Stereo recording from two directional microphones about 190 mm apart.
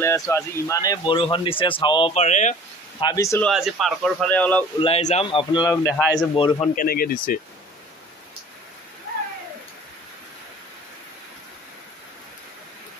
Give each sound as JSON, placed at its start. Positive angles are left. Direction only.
{"t": 0.0, "sound": "speech", "side_deg": 15}
{"t": 3.0, "sound": "speech", "side_deg": 20}
{"t": 3.4, "sound": "speech", "side_deg": 0}
{"t": 4.7, "sound": "speech", "side_deg": 30}
{"t": 6.7, "sound": "speech", "side_deg": 50}